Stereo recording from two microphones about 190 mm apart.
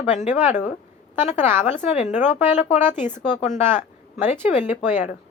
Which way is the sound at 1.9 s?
35° left (ahead or behind).